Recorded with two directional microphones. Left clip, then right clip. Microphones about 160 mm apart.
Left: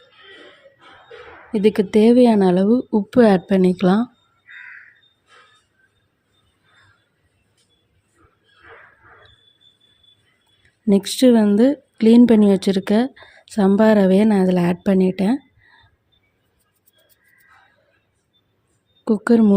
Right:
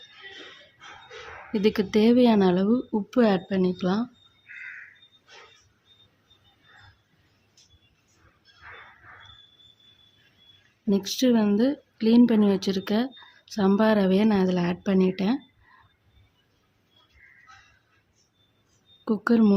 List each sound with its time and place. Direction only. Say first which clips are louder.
1.5 s a woman's voice: left 7 dB; 25° left (ahead or behind)
10.8 s a woman's voice: left 9 dB; 40° left (ahead or behind)
19.0 s a woman's voice: left 6 dB; 25° left (ahead or behind)